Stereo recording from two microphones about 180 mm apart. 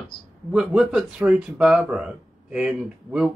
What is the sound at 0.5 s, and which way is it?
Speech, centre (ahead or behind).